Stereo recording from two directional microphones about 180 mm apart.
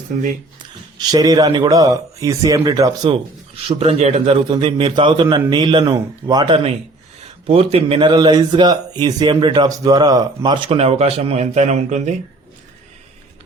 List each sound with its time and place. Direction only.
0.9 s speech: 20° right (ahead or behind)
3.7 s speech: 35° right (ahead or behind)